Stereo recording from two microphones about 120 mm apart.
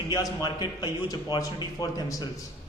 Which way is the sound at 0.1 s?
30° left (ahead or behind).